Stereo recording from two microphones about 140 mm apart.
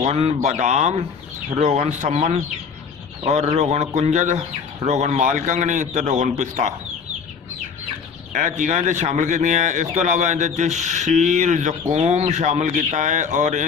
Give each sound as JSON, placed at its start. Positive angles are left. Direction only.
{"t": 0.0, "sound": "a man's voice", "side_deg": -50}
{"t": 8.3, "sound": "speech", "side_deg": -65}